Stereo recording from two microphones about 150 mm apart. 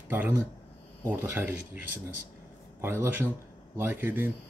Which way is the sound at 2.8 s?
15° right (ahead or behind).